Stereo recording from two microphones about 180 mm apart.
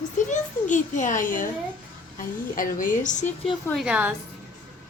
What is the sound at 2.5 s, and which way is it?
Speech, 50° left (ahead or behind).